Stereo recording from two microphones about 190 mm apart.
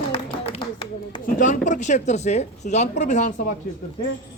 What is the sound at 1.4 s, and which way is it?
Speech, 40° left (ahead or behind).